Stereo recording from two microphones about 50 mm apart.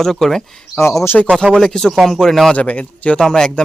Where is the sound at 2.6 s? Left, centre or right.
Left.